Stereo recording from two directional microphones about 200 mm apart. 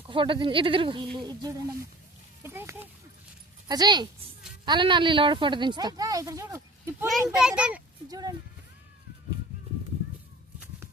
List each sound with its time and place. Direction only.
0.1 s a woman's voice: 25° right (ahead or behind)
3.7 s a woman's voice: 20° right (ahead or behind)
7.1 s a child's voice: 5° right (ahead or behind)
8.0 s a woman's voice: 20° right (ahead or behind)